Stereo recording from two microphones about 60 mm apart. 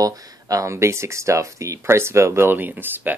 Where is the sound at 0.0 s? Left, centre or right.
Right.